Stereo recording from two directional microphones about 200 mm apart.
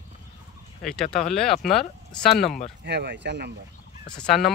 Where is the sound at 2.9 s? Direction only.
60° right (ahead or behind).